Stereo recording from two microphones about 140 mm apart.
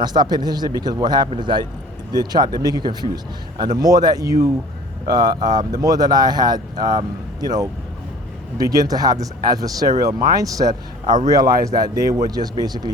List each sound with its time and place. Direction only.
0.0 s a man's voice: 30° right (ahead or behind)